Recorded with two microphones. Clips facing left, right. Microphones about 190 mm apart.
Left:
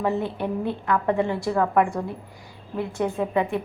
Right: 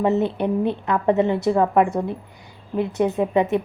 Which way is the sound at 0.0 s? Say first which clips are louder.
Right 5 dB; 20° right (ahead or behind).